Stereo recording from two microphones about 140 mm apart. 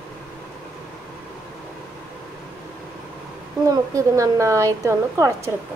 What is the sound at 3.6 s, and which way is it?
A woman's voice, 25° right (ahead or behind).